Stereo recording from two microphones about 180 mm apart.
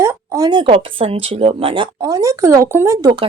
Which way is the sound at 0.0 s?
15° right (ahead or behind).